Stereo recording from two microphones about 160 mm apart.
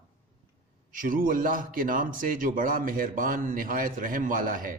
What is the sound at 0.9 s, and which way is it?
A man's voice, 60° right (ahead or behind).